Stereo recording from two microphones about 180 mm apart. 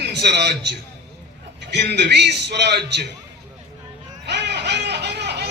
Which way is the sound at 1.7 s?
70° right (ahead or behind).